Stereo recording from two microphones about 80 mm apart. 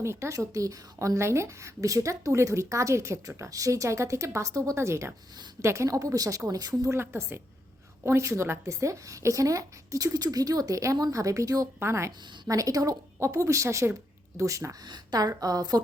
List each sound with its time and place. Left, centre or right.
0.0 s a woman's voice: right
6.9 s a woman's voice: right
14.8 s a woman's voice: right
15.4 s speech: right